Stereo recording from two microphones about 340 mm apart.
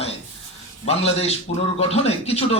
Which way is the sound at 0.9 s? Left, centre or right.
Centre.